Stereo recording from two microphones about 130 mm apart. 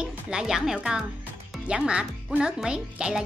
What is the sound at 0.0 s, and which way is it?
A woman's voice, 5° right (ahead or behind).